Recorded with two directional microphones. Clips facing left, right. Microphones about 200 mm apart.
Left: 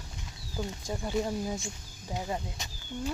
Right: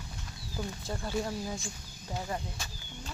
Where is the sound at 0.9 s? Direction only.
15° left (ahead or behind).